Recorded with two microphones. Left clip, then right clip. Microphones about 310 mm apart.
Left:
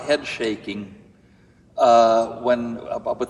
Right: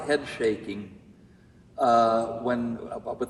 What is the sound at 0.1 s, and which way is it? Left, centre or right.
A man's voice, centre.